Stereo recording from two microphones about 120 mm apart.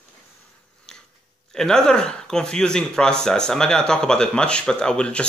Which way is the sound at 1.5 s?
5° left (ahead or behind).